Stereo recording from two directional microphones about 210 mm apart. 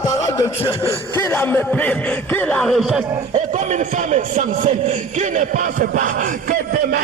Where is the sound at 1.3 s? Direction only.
10° left (ahead or behind).